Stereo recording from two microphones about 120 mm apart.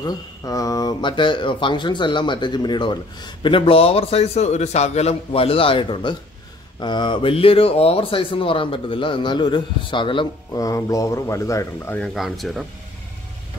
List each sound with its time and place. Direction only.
0.0 s speech: 30° left (ahead or behind)
10.6 s speech: 30° left (ahead or behind)
12.0 s speech: centre (ahead or behind)